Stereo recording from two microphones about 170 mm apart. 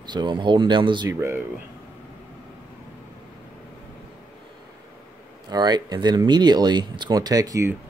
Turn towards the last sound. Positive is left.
turn(degrees=-20)  # may be behind; listen again after turning